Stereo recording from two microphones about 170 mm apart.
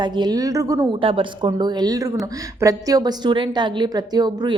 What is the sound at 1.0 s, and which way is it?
A woman's voice, 30° right (ahead or behind).